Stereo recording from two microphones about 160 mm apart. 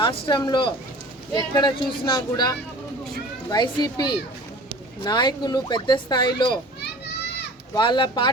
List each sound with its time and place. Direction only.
0.0 s speech: 30° left (ahead or behind)
7.8 s speech: 30° left (ahead or behind)